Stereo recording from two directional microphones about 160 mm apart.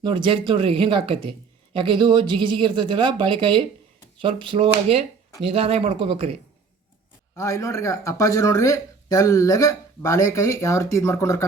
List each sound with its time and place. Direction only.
0.0 s speech: 30° right (ahead or behind)
7.3 s speech: 20° left (ahead or behind)